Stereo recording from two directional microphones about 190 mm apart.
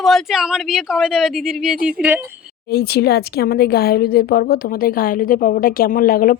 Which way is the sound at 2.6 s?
55° left (ahead or behind).